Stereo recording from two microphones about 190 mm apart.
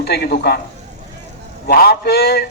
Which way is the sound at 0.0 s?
55° left (ahead or behind).